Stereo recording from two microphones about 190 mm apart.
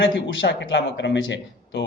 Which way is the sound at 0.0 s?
70° left (ahead or behind).